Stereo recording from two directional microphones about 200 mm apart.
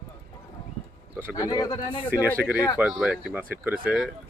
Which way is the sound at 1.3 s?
20° left (ahead or behind).